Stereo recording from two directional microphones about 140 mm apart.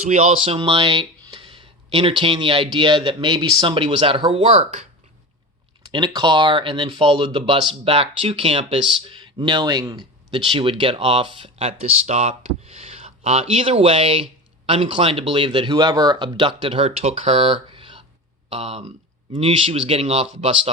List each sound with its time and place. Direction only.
0.1 s speech: 55° right (ahead or behind)
0.4 s speech: 40° right (ahead or behind)
5.9 s speech: 35° right (ahead or behind); by 18.9 s 50° right (ahead or behind)
19.3 s speech: 40° right (ahead or behind)